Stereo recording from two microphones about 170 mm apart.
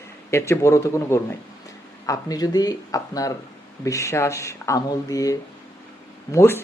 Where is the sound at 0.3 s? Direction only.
15° left (ahead or behind).